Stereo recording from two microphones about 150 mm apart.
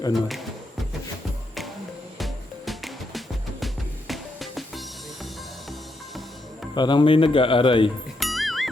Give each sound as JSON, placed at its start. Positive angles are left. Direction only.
{"t": 0.1, "sound": "speech", "side_deg": 0}
{"t": 2.1, "sound": "music", "side_deg": 0}
{"t": 6.7, "sound": "speech", "side_deg": 30}
{"t": 8.2, "sound": "music", "side_deg": 0}